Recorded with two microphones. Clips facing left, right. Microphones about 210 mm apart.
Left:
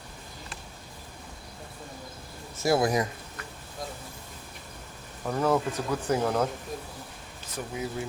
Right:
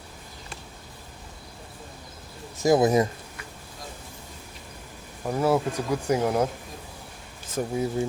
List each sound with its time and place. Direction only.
2.6 s speech: 15° right (ahead or behind)
5.2 s speech: 10° right (ahead or behind)
7.5 s speech: 35° right (ahead or behind)